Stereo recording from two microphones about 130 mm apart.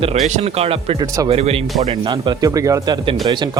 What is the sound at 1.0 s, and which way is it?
Speech, 25° right (ahead or behind).